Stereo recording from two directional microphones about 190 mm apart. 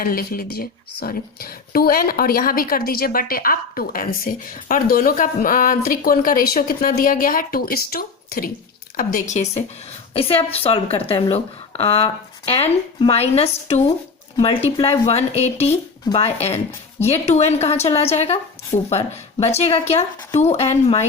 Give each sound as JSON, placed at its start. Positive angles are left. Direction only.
{"t": 0.0, "sound": "speech", "side_deg": 50}